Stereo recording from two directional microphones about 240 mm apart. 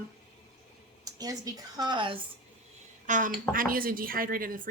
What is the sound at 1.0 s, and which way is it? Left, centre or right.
Speech, centre.